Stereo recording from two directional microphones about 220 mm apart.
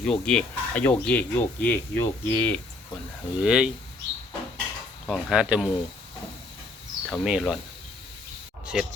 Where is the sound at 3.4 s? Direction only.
5° right (ahead or behind).